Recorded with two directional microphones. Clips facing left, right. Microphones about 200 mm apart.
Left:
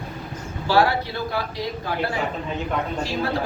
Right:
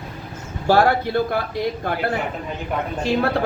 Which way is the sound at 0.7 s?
50° right (ahead or behind).